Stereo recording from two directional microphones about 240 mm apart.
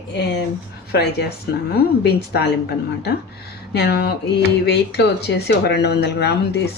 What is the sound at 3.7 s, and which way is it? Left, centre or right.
Speech, left.